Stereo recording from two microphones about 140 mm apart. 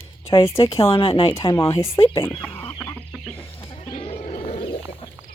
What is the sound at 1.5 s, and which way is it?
Speech, 20° left (ahead or behind).